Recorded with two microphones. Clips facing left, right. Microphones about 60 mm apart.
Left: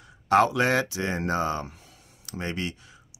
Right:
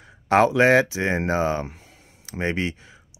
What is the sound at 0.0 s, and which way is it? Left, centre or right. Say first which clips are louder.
Speech: right 2 dB; right.